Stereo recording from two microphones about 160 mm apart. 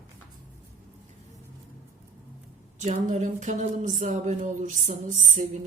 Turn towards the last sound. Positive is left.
turn(degrees=-50)  # may be behind; listen again after turning